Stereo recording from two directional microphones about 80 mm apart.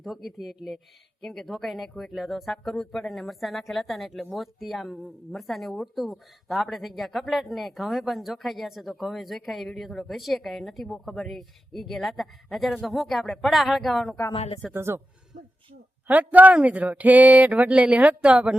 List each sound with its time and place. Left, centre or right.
0.0 s a woman's voice: centre
14.7 s speech: right
16.0 s speech: centre